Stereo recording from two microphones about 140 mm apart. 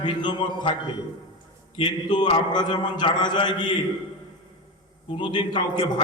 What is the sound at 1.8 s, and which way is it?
A man's voice, 35° left (ahead or behind).